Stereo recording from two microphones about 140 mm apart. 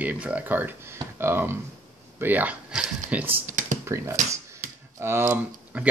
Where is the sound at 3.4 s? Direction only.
65° right (ahead or behind).